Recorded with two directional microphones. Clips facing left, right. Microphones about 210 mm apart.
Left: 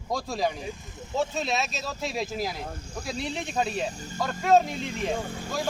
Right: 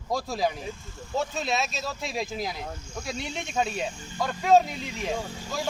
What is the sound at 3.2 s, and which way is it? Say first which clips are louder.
Speech: even; 35° left (ahead or behind).